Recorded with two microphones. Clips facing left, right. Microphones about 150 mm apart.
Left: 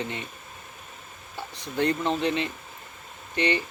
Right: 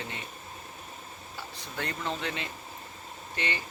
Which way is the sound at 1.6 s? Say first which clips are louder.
Left 10 dB; 20° left (ahead or behind).